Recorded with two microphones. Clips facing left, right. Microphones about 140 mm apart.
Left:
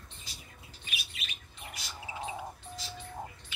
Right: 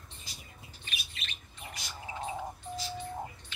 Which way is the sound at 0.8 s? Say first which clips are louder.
Left 1 dB; 10° left (ahead or behind).